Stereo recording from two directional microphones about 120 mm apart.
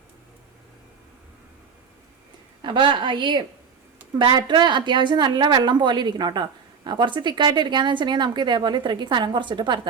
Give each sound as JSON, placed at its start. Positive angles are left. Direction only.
{"t": 2.6, "sound": "a woman's voice", "side_deg": -40}